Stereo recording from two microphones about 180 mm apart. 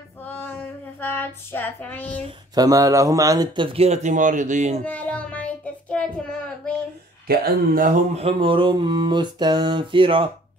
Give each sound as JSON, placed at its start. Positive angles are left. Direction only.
{"t": 0.2, "sound": "child singing", "side_deg": 10}
{"t": 2.2, "sound": "speech", "side_deg": -20}
{"t": 4.8, "sound": "child singing", "side_deg": 10}
{"t": 7.2, "sound": "speech", "side_deg": -55}
{"t": 8.1, "sound": "speech", "side_deg": -35}